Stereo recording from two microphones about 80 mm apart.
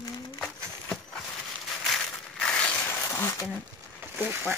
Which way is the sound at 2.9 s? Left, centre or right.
Left.